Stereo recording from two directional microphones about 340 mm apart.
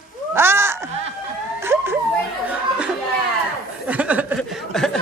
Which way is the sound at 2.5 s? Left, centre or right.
Centre.